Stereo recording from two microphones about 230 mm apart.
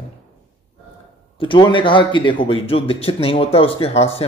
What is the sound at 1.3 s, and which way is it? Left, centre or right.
Speech, left.